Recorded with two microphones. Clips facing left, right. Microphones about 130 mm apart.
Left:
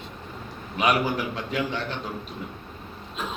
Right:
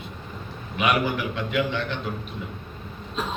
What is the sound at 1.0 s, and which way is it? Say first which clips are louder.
Speech: right 1 dB; 35° left (ahead or behind).